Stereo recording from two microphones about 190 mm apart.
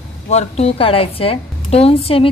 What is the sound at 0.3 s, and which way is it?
A woman's voice, 35° left (ahead or behind).